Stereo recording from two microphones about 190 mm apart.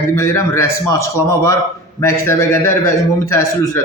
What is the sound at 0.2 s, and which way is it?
A man's voice, 15° left (ahead or behind).